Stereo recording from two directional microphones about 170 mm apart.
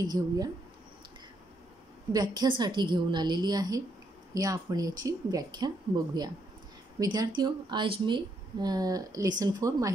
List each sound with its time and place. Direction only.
0.0 s speech: 25° right (ahead or behind)
2.1 s speech: 25° right (ahead or behind)
7.0 s speech: 25° right (ahead or behind)